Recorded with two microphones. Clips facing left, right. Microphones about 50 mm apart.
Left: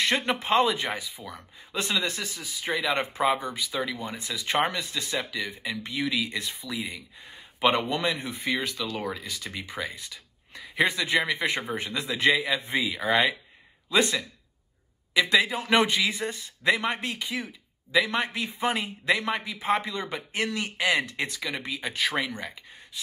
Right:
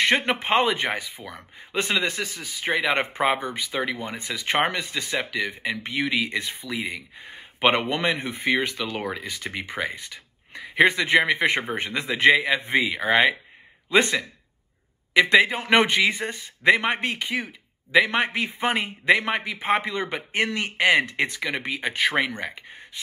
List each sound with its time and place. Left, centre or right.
0.0 s a man's voice: right